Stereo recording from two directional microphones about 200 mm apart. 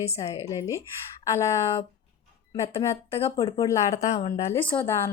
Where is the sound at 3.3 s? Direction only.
25° left (ahead or behind).